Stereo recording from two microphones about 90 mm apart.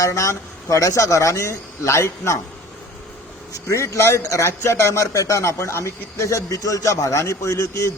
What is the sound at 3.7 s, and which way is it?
A man's voice, 30° left (ahead or behind).